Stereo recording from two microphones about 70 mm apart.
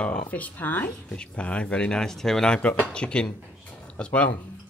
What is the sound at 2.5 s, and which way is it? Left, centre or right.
Speech, left.